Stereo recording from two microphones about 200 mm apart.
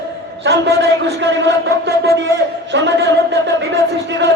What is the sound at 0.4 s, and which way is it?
Speech, 60° right (ahead or behind).